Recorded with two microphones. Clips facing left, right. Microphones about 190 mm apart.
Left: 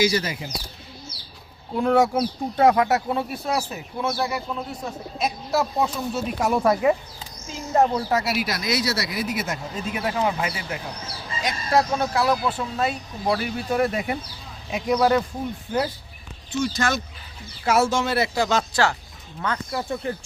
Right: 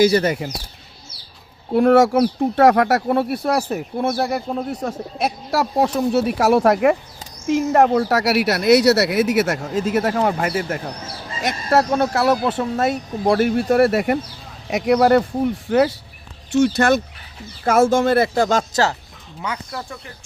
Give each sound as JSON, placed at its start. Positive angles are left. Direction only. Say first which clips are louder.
{"t": 0.0, "sound": "speech", "louder": "right 7 dB", "side_deg": -55}
{"t": 1.7, "sound": "speech", "louder": "right 6 dB", "side_deg": -70}
{"t": 4.9, "sound": "speech", "louder": "right 4 dB", "side_deg": -70}
{"t": 9.9, "sound": "speech", "louder": "right 4 dB", "side_deg": -45}
{"t": 15.7, "sound": "speech", "louder": "right 8 dB", "side_deg": -75}
{"t": 19.4, "sound": "speech", "louder": "even", "side_deg": -10}